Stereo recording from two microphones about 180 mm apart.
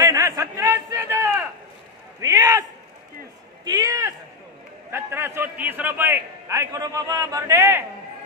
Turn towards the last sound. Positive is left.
turn(degrees=-15)  # may be behind; listen again after turning